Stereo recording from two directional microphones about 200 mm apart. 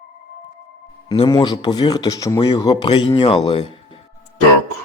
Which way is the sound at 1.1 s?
20° left (ahead or behind).